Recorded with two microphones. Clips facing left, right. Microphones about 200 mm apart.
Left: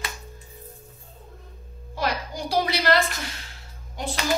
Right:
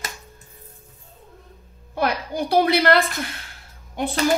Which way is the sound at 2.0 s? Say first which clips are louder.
Right 5 dB; 60° right (ahead or behind).